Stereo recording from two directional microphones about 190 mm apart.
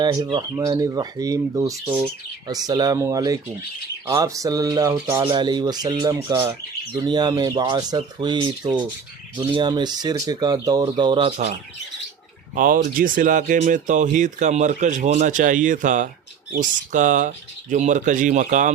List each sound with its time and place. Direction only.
0.0 s speech: 20° right (ahead or behind)
1.7 s speech: 5° right (ahead or behind)
2.5 s speech: 20° right (ahead or behind)
12.5 s speech: 45° right (ahead or behind)